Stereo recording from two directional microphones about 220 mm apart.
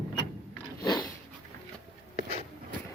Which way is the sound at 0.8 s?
20° left (ahead or behind).